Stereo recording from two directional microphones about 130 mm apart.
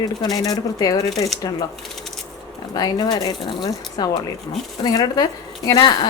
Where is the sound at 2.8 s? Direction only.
30° left (ahead or behind).